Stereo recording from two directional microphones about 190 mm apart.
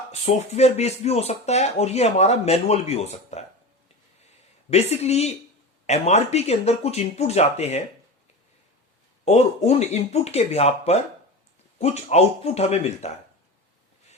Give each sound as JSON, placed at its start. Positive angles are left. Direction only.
{"t": 0.1, "sound": "speech", "side_deg": 35}
{"t": 4.7, "sound": "speech", "side_deg": 35}
{"t": 9.2, "sound": "speech", "side_deg": 35}